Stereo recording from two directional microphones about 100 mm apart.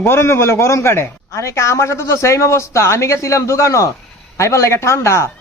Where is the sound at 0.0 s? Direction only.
25° left (ahead or behind).